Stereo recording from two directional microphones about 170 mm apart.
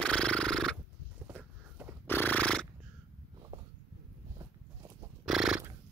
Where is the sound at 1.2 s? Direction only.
10° right (ahead or behind).